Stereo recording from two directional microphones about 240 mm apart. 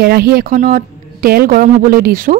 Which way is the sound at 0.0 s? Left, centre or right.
Right.